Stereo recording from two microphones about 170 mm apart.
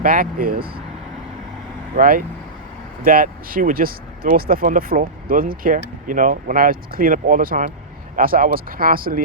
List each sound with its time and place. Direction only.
0.0 s speech: 55° right (ahead or behind)
2.0 s speech: 55° right (ahead or behind)